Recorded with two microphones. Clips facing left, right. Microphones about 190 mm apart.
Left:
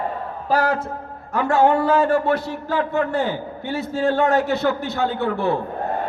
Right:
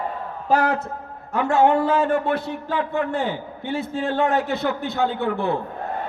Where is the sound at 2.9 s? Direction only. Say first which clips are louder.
Left 2 dB; 15° right (ahead or behind).